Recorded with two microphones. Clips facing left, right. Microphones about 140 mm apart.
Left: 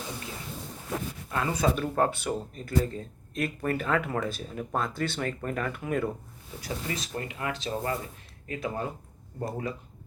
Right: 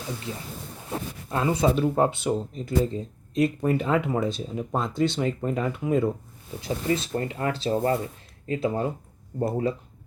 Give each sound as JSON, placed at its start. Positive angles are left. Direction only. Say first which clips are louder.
{"t": 0.9, "sound": "speech", "louder": "right 2 dB", "side_deg": -25}